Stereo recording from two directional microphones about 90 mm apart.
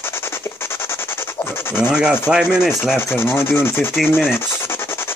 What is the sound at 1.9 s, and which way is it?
Rub, 10° right (ahead or behind).